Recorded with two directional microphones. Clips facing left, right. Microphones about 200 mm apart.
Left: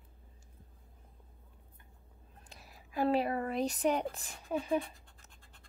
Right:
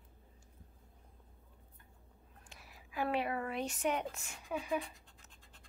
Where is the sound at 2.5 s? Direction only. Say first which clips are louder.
Left 3 dB; 40° left (ahead or behind).